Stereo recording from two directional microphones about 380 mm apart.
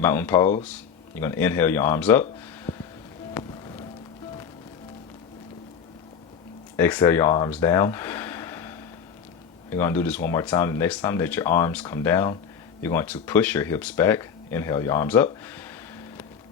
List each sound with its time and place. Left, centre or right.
0.0 s speech: centre
6.7 s speech: centre